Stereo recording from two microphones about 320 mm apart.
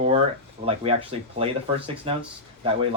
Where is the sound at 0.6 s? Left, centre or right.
Centre.